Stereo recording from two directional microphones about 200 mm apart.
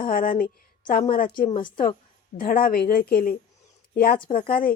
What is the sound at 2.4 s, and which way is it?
A woman's voice, 45° left (ahead or behind).